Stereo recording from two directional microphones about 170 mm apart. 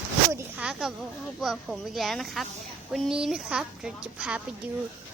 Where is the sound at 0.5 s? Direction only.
5° right (ahead or behind).